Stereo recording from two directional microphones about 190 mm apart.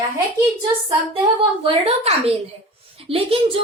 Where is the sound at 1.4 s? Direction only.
30° right (ahead or behind).